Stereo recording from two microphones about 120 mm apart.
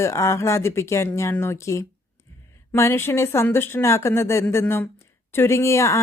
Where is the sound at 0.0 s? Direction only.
25° left (ahead or behind).